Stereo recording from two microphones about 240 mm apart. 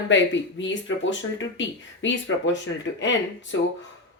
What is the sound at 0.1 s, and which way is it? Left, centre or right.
Speech, left.